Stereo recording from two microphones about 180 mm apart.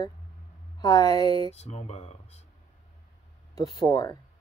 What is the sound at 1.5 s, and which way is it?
Speech, 35° left (ahead or behind).